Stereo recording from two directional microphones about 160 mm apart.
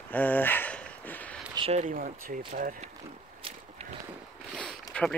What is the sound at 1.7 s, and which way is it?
Speech, 50° right (ahead or behind).